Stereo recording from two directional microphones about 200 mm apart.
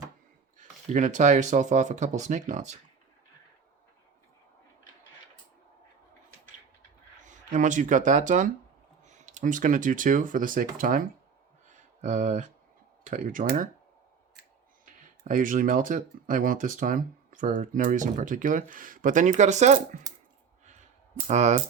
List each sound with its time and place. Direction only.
0.9 s speech: 40° right (ahead or behind)
7.3 s speech: 40° right (ahead or behind)
15.3 s speech: 40° right (ahead or behind)
21.2 s speech: 35° right (ahead or behind)